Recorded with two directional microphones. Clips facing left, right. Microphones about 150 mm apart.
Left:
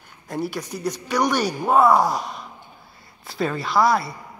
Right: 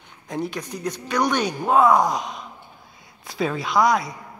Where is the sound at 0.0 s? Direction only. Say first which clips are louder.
Even; 5° left (ahead or behind).